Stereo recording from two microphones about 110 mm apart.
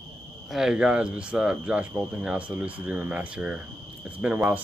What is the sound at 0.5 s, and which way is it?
Speech, 5° right (ahead or behind).